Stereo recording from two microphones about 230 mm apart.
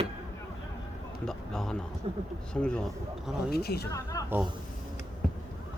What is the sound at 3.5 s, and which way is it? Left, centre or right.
Speech, left.